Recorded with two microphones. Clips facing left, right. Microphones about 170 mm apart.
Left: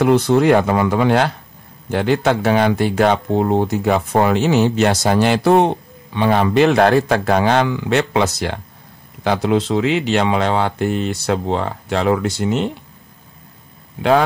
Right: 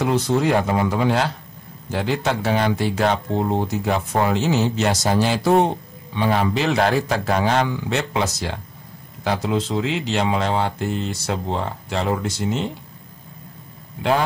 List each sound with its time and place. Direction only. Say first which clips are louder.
0.0 s speech: left 6 dB; 65° left (ahead or behind)